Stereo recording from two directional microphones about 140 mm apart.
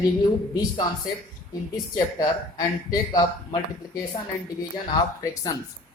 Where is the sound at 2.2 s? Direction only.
25° left (ahead or behind).